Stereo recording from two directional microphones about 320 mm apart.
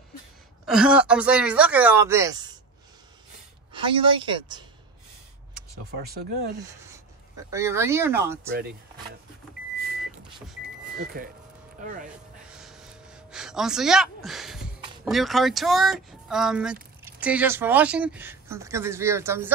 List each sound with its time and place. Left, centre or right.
0.7 s speech: centre
3.7 s speech: centre
5.9 s speech: right
6.9 s speech: centre
8.5 s speech: right
12.4 s gasp: centre
15.0 s speech: centre